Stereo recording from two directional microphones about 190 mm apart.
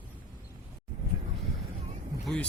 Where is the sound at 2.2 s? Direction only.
5° left (ahead or behind).